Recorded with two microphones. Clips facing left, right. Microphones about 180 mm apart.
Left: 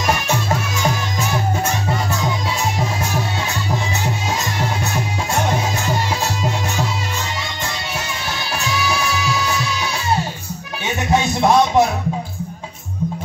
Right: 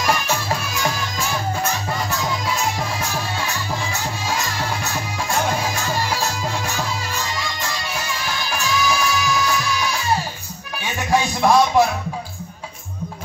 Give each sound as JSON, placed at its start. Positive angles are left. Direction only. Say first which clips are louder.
{"t": 0.0, "sound": "music", "louder": "left 2 dB", "side_deg": 20}
{"t": 5.3, "sound": "music", "louder": "left 1 dB", "side_deg": 20}
{"t": 8.5, "sound": "music", "louder": "right 1 dB", "side_deg": 20}
{"t": 11.1, "sound": "music", "louder": "left 1 dB", "side_deg": 20}